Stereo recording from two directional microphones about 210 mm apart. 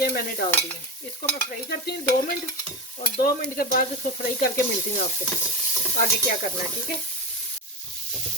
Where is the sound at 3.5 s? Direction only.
45° left (ahead or behind).